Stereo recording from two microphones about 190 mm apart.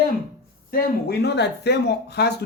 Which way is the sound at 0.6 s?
50° left (ahead or behind).